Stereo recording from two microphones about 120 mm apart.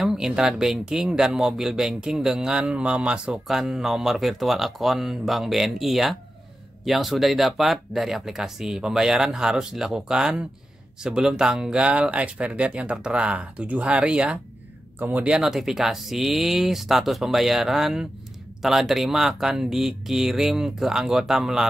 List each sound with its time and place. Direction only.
0.0 s speech: 5° right (ahead or behind)